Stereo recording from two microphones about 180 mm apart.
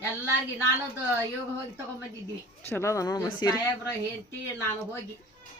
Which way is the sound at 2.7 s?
15° left (ahead or behind).